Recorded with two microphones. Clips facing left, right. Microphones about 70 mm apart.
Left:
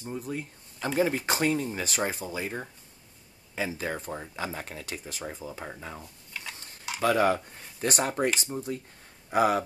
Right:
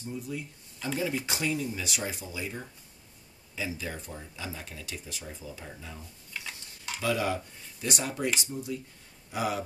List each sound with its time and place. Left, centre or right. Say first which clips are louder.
0.0 s speech: left 2 dB; left